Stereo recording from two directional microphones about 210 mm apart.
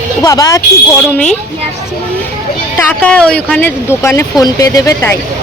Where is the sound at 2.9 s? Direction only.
5° left (ahead or behind).